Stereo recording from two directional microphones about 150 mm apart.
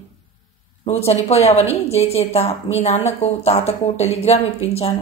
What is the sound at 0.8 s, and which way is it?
Speech, 45° left (ahead or behind).